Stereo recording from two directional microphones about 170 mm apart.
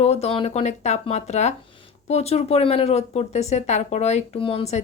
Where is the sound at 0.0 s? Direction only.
40° left (ahead or behind).